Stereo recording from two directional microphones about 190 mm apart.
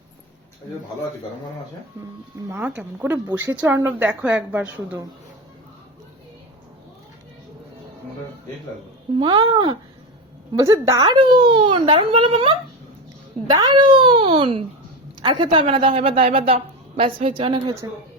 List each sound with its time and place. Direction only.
2.5 s speech: 10° right (ahead or behind)
9.1 s a woman's voice: 25° right (ahead or behind)
10.5 s a woman's voice: 15° right (ahead or behind)